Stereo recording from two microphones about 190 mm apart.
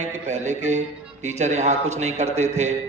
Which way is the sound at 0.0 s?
35° right (ahead or behind).